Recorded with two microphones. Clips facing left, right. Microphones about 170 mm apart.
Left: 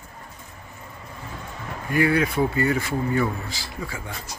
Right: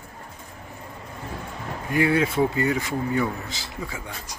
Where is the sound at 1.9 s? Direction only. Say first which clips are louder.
Even; 20° right (ahead or behind).